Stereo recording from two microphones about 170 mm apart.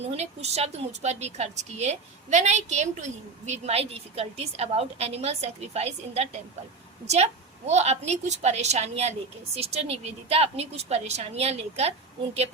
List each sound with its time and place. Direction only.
0.2 s a woman's voice: 40° right (ahead or behind)
7.7 s a woman's voice: 40° right (ahead or behind)